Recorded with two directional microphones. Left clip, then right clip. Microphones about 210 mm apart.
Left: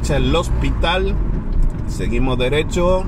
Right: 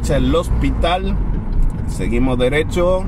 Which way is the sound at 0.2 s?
15° right (ahead or behind).